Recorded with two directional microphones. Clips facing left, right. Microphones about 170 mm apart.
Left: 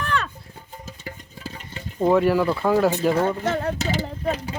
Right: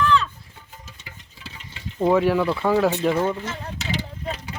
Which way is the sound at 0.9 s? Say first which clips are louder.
Left 8 dB; 45° left (ahead or behind).